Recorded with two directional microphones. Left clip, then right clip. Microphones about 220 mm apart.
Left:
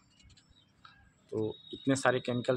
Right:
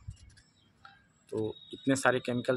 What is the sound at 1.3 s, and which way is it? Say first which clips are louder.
Speech: even; 5° right (ahead or behind).